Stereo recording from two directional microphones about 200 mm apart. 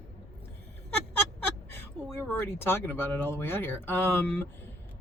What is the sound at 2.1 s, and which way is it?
Speech, 10° left (ahead or behind).